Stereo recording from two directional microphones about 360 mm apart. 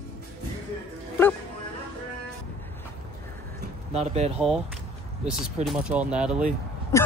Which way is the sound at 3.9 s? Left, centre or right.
Centre.